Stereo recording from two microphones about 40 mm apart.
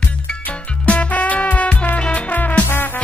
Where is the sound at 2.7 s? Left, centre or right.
Left.